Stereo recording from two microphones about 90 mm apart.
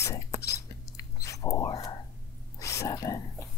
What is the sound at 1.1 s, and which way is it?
Chewing, 35° left (ahead or behind).